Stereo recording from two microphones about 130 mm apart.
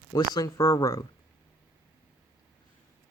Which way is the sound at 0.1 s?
25° left (ahead or behind).